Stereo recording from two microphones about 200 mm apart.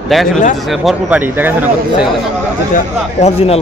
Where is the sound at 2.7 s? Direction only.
30° left (ahead or behind).